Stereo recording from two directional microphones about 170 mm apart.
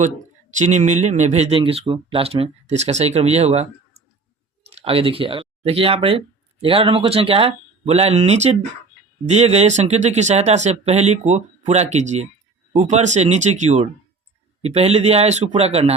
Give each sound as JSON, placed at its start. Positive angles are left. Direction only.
{"t": 0.0, "sound": "speech", "side_deg": -45}